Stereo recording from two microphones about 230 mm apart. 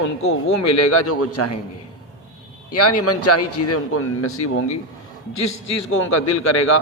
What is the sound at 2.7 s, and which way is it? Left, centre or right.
A man's voice, left.